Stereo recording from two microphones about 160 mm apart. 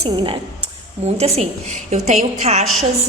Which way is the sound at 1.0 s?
40° right (ahead or behind).